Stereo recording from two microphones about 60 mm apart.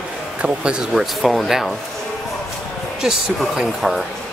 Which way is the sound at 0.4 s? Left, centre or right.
Centre.